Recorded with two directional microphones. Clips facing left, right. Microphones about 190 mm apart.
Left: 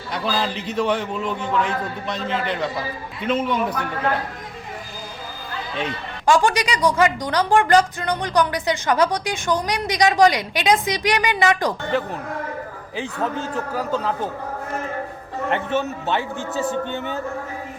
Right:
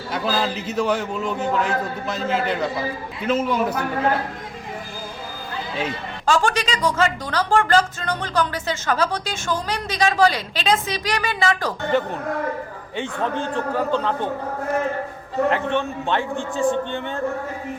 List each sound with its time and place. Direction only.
0.1 s a man's voice: centre (ahead or behind)
6.2 s a woman's voice: 15° left (ahead or behind)
11.9 s a man's voice: centre (ahead or behind)
15.4 s a man's voice: 5° left (ahead or behind)